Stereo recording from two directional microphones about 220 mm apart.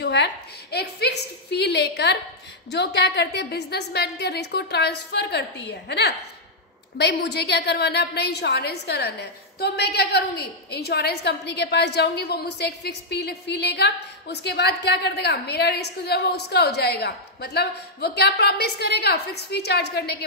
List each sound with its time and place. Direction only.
0.0 s a woman's voice: 50° left (ahead or behind)